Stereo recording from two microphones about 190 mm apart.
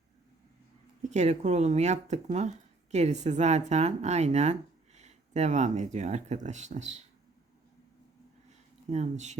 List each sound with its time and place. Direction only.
1.1 s speech: 35° right (ahead or behind)
8.9 s speech: 35° right (ahead or behind)